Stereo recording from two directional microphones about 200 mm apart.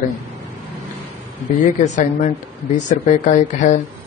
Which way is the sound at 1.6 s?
35° left (ahead or behind).